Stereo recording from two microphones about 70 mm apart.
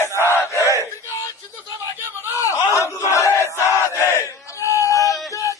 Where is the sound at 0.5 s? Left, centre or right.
Left.